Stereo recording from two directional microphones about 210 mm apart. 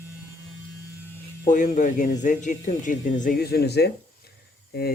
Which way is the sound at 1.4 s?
35° left (ahead or behind).